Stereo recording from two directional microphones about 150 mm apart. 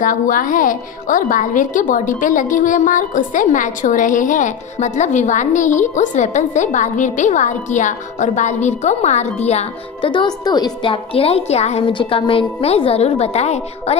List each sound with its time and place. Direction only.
0.0 s a woman's voice: 65° left (ahead or behind); by 10.1 s 45° left (ahead or behind)
10.1 s a woman's voice: 25° left (ahead or behind); by 13.9 s 45° left (ahead or behind)